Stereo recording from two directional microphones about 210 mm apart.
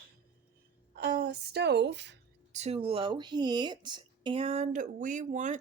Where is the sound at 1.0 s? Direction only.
50° right (ahead or behind).